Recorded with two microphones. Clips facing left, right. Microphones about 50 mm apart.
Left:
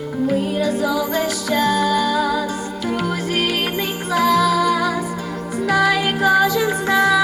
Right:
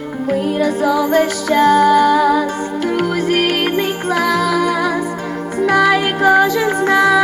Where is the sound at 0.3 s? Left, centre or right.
Right.